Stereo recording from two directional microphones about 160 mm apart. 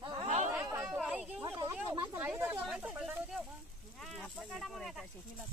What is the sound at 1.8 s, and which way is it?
Speech, 15° right (ahead or behind).